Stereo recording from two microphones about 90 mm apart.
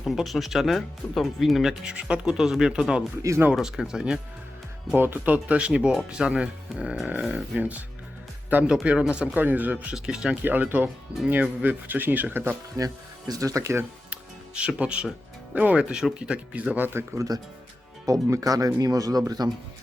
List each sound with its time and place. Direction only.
0.0 s speech: centre (ahead or behind)
3.2 s speech: 30° right (ahead or behind)
3.5 s speech: 5° right (ahead or behind)
4.9 s speech: 25° right (ahead or behind); by 7.6 s 5° right (ahead or behind)
7.6 s speech: 15° right (ahead or behind)
10.4 s speech: 20° right (ahead or behind)
12.7 s speech: 40° right (ahead or behind)
14.1 s music: 10° right (ahead or behind)
15.5 s speech: 15° right (ahead or behind)
17.2 s speech: 45° right (ahead or behind)